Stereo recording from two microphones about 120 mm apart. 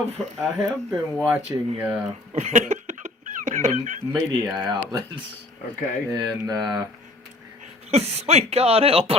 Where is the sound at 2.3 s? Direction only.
70° right (ahead or behind); by 4.0 s 90° right.